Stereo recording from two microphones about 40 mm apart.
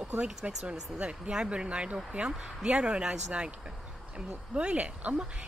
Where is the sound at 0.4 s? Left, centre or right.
Centre.